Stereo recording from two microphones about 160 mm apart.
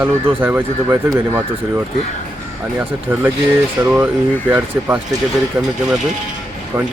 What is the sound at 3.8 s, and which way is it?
Speech, 15° right (ahead or behind).